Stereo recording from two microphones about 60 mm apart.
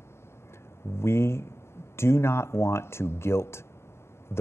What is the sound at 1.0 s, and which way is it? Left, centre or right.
Speech, left.